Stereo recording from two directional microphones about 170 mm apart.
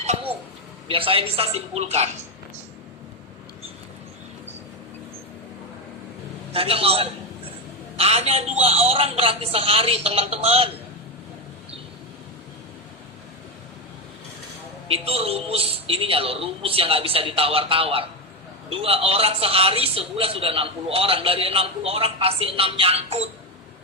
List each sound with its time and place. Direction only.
0.0 s a sound: 35° right (ahead or behind)
0.9 s a man's voice: 30° right (ahead or behind)
6.5 s a man's voice: 35° right (ahead or behind)
14.9 s a man's voice: 35° right (ahead or behind)